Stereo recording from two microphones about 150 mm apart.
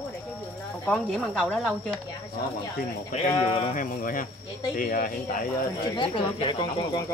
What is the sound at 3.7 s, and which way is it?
Speech, 65° left (ahead or behind).